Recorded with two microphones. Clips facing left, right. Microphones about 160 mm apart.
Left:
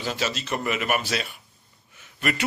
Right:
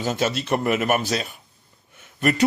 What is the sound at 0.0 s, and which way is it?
A man's voice, 50° right (ahead or behind).